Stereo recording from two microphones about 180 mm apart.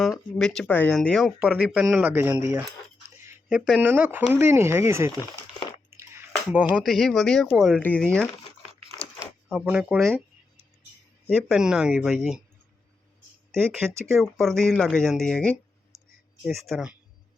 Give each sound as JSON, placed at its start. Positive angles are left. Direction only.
{"t": 0.3, "sound": "speech", "side_deg": 5}
{"t": 3.2, "sound": "a sound", "side_deg": -15}
{"t": 3.6, "sound": "speech", "side_deg": -5}
{"t": 5.9, "sound": "squish", "side_deg": -15}
{"t": 6.3, "sound": "speech", "side_deg": -5}
{"t": 9.5, "sound": "speech", "side_deg": -5}
{"t": 11.4, "sound": "speech", "side_deg": 0}
{"t": 13.8, "sound": "speech", "side_deg": -15}
{"t": 14.3, "sound": "speech", "side_deg": 0}
{"t": 15.9, "sound": "clicking", "side_deg": -15}
{"t": 16.4, "sound": "speech", "side_deg": 0}